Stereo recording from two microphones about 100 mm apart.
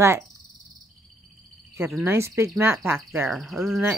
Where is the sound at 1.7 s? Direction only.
25° right (ahead or behind).